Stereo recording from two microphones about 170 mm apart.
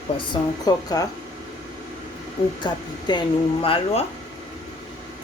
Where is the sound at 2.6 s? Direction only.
25° left (ahead or behind).